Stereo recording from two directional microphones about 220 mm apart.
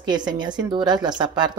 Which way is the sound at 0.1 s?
20° right (ahead or behind).